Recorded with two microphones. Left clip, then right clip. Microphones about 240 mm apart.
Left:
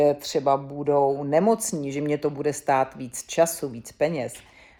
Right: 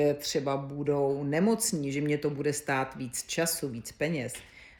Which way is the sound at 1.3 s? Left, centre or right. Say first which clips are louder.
Left 7 dB; centre.